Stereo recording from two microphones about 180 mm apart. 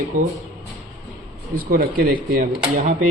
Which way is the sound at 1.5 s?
55° right (ahead or behind).